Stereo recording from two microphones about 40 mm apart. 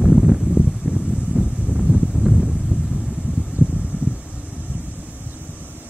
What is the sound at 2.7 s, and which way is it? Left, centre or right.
Vehicle, right.